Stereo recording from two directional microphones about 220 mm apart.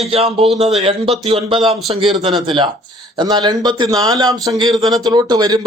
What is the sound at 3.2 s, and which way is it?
Speech, 20° right (ahead or behind).